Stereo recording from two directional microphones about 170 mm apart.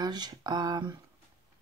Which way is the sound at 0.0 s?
25° right (ahead or behind).